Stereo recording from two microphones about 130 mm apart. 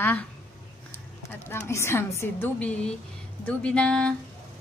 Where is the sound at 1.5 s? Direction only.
20° left (ahead or behind).